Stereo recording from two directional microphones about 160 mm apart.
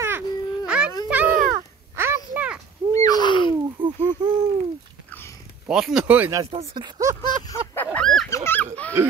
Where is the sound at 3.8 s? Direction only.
10° right (ahead or behind).